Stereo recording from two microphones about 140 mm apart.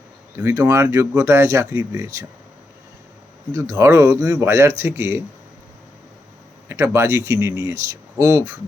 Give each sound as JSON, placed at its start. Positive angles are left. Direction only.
{"t": 0.3, "sound": "speech", "side_deg": -15}
{"t": 3.5, "sound": "speech", "side_deg": -25}
{"t": 6.7, "sound": "speech", "side_deg": -20}